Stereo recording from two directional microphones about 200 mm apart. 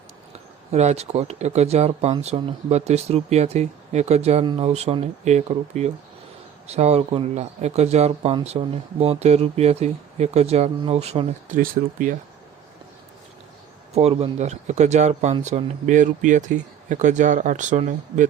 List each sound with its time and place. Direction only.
0.3 s speech: 35° right (ahead or behind)
13.9 s speech: 30° right (ahead or behind)